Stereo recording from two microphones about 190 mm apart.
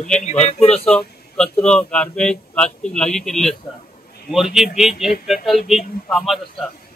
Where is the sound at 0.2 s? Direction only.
35° left (ahead or behind).